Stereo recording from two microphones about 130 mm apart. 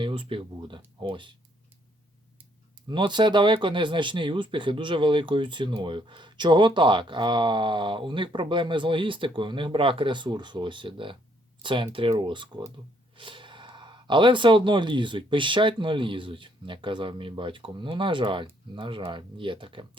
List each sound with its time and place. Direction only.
0.0 s speech: 40° right (ahead or behind)
2.8 s speech: 35° right (ahead or behind)